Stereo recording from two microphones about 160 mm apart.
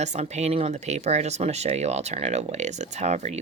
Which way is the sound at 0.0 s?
45° right (ahead or behind).